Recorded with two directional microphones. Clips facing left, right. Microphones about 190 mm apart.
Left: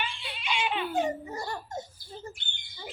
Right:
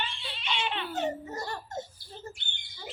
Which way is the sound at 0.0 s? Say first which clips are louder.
Left 1 dB; 10° left (ahead or behind).